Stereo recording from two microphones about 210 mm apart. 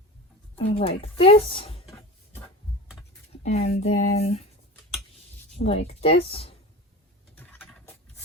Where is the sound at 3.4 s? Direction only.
30° left (ahead or behind).